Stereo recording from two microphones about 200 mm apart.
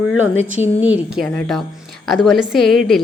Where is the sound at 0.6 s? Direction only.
10° right (ahead or behind).